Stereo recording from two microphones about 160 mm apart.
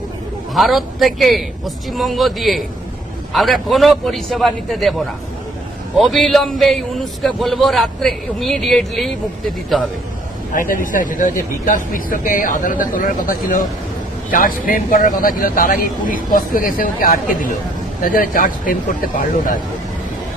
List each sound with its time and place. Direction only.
0.5 s a man's voice: centre (ahead or behind)
10.5 s speech: 55° left (ahead or behind)